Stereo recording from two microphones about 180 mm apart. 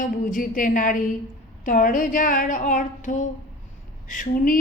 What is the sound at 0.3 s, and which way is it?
A woman's voice, 50° left (ahead or behind).